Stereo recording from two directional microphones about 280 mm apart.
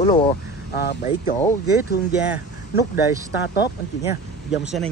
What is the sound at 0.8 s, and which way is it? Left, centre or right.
Speech, left.